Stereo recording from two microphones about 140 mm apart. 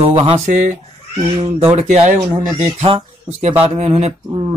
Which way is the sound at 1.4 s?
45° right (ahead or behind).